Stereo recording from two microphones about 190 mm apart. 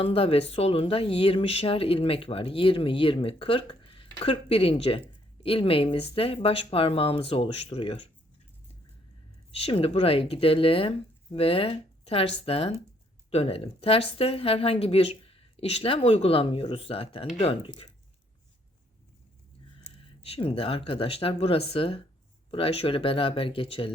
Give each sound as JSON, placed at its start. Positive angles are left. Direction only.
{"t": 0.0, "sound": "speech", "side_deg": 30}
{"t": 9.6, "sound": "speech", "side_deg": 30}
{"t": 19.8, "sound": "speech", "side_deg": 30}